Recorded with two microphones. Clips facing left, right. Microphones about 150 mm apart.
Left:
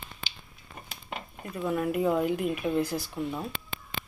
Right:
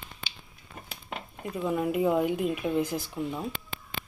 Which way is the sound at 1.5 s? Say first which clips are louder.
Right 1 dB; 15° right (ahead or behind).